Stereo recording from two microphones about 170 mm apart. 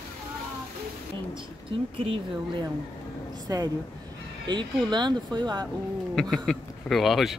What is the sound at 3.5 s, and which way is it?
Speech, 20° right (ahead or behind).